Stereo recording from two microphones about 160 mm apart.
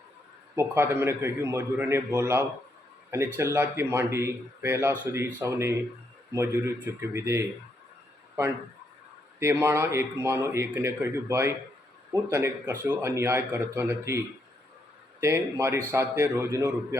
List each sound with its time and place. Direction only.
0.5 s a man's voice: 15° right (ahead or behind)
15.2 s a man's voice: 15° right (ahead or behind)